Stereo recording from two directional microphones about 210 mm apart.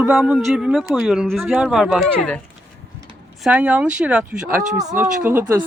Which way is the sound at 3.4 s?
5° right (ahead or behind).